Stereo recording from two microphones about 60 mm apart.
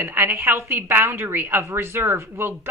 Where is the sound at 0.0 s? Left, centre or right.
Right.